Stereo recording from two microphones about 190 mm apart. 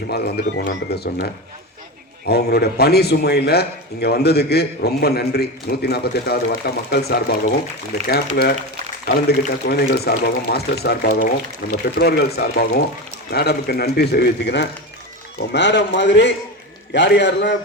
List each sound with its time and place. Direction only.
0.6 s a man's voice: 55° left (ahead or behind)
9.6 s a man's voice: 55° left (ahead or behind)